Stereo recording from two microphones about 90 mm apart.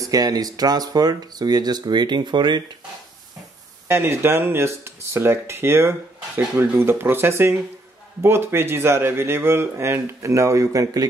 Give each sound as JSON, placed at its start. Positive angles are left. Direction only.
{"t": 0.0, "sound": "speech", "side_deg": -45}
{"t": 3.9, "sound": "speech", "side_deg": -25}